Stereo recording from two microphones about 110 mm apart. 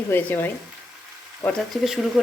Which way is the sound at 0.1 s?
15° left (ahead or behind).